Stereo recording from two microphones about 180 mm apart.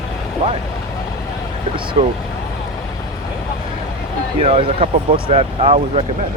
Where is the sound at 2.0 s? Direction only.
30° right (ahead or behind).